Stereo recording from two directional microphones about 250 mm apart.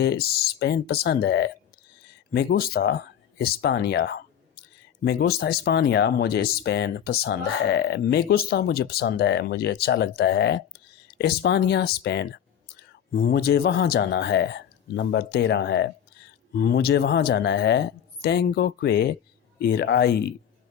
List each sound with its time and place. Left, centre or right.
0.0 s speech: left